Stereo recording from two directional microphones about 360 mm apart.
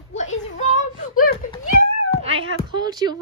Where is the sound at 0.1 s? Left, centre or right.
Centre.